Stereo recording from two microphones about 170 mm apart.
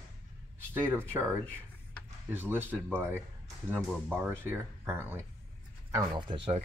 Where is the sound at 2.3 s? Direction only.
10° right (ahead or behind).